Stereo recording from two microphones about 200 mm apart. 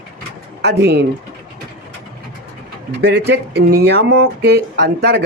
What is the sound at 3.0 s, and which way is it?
Speech, 55° right (ahead or behind).